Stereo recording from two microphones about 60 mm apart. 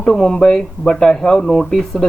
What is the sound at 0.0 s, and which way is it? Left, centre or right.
Speech, centre.